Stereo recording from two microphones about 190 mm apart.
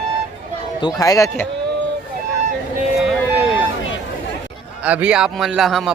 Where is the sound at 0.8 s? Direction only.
20° left (ahead or behind).